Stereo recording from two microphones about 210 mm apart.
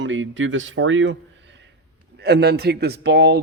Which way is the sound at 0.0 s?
65° right (ahead or behind).